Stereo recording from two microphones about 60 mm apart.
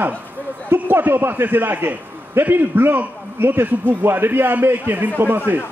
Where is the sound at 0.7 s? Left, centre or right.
Right.